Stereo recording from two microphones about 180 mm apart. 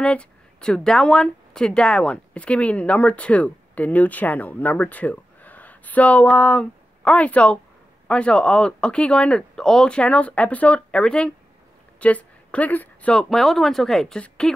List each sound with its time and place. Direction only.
0.0 s a woman's voice: 5° left (ahead or behind)